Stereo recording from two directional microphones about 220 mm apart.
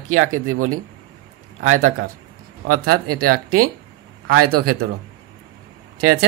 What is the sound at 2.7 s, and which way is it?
A man's voice, 90° right.